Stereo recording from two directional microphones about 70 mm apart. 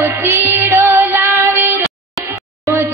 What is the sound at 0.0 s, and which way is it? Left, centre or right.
Music, right.